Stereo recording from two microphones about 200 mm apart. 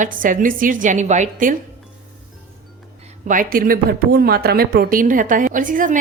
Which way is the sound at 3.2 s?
45° right (ahead or behind).